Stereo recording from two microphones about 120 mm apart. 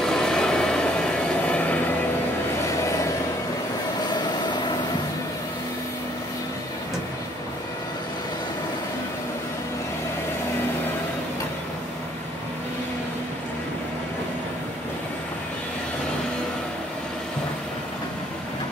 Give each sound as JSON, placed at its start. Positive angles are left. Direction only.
{"t": 0.0, "sound": "vehicle", "side_deg": 5}
{"t": 4.1, "sound": "vehicle", "side_deg": 35}